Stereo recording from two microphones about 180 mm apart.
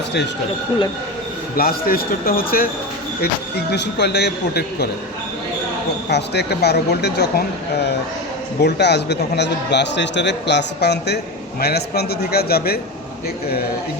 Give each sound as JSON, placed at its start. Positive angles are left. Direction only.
{"t": 1.5, "sound": "a man's voice", "side_deg": 55}
{"t": 3.7, "sound": "a man's voice", "side_deg": 70}
{"t": 6.1, "sound": "a man's voice", "side_deg": 70}